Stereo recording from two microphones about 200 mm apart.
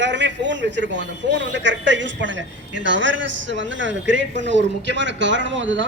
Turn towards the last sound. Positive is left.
turn(degrees=-65)  # may be behind; listen again after turning